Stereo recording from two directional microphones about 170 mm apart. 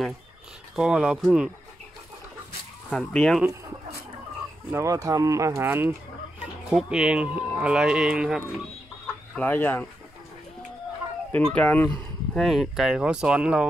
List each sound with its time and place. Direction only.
0.7 s speech: 5° right (ahead or behind)
2.9 s speech: 5° left (ahead or behind)
4.6 s speech: 15° right (ahead or behind)
9.3 s speech: 10° left (ahead or behind)
11.3 s speech: 10° left (ahead or behind)